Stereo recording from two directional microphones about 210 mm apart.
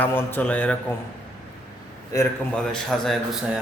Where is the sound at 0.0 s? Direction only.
10° left (ahead or behind).